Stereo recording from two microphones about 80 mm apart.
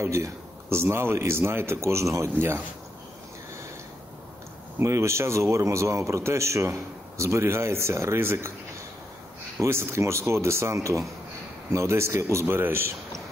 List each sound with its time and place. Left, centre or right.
0.0 s speech: right
4.7 s speech: right
9.6 s speech: right